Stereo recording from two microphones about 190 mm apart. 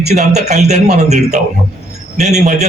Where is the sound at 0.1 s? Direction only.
35° right (ahead or behind).